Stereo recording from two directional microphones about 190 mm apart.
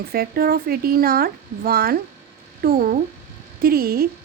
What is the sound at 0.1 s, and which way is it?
Speech, 50° right (ahead or behind).